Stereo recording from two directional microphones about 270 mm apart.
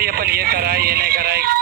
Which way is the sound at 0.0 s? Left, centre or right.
Right.